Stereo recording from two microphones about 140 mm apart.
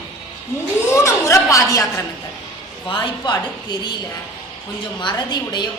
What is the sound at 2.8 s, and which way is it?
A woman's voice, 35° left (ahead or behind).